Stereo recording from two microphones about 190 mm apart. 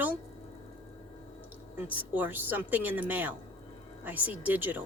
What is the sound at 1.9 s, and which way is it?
Speech, 10° right (ahead or behind).